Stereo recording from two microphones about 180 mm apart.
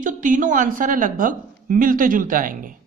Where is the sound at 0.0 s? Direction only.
45° right (ahead or behind).